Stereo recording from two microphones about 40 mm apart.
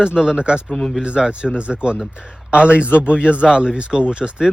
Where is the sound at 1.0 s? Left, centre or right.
Right.